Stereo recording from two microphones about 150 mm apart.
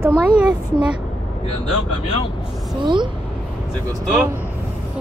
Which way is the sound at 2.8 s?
30° right (ahead or behind).